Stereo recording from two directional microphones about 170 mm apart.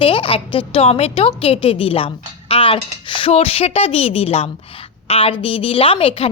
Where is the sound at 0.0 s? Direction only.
30° left (ahead or behind).